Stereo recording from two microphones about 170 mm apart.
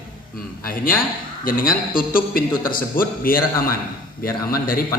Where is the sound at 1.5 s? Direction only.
55° left (ahead or behind).